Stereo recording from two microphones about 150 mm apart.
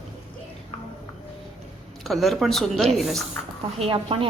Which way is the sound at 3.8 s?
40° right (ahead or behind).